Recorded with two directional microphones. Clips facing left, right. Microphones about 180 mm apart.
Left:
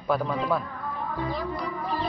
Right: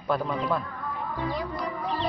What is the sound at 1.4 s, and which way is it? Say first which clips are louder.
Speech: left 1 dB; centre (ahead or behind).